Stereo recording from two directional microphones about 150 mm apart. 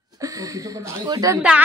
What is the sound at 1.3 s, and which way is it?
Speech, 5° right (ahead or behind).